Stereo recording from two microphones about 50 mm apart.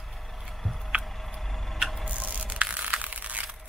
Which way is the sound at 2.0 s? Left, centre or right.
Right.